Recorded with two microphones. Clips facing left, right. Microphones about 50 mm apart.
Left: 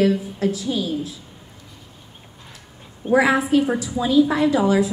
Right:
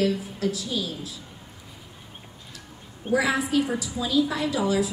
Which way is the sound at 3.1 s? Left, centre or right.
Left.